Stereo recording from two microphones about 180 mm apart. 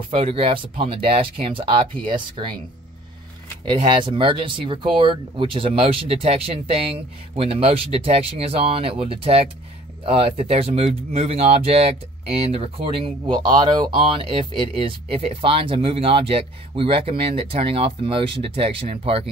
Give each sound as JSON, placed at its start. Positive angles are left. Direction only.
{"t": 0.1, "sound": "speech", "side_deg": -30}
{"t": 3.6, "sound": "speech", "side_deg": -25}